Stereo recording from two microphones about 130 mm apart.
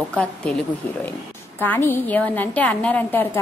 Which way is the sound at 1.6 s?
15° left (ahead or behind).